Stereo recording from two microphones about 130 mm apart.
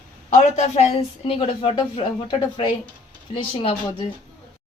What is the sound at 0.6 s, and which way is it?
Speech, 55° left (ahead or behind).